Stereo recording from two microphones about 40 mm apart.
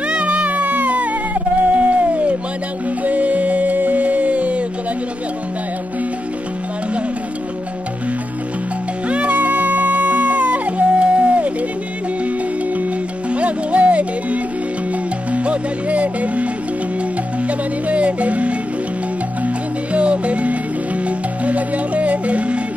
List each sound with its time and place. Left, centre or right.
0.1 s music: right
0.5 s music: right
1.7 s a sound: right
3.0 s music: right
9.1 s music: right
13.3 s music: right
17.8 s music: right